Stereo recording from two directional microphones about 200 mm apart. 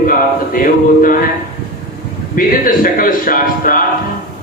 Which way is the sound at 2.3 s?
45° left (ahead or behind).